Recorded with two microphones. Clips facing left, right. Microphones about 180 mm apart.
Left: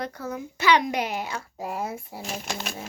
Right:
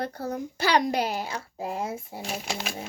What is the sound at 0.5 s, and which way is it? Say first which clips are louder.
A child's voice: left 2 dB; 35° right (ahead or behind).